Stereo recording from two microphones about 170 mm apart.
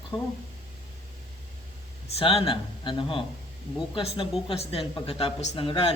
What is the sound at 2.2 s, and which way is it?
A man's voice, 30° left (ahead or behind).